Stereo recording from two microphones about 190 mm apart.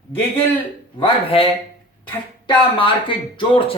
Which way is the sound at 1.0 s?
30° left (ahead or behind).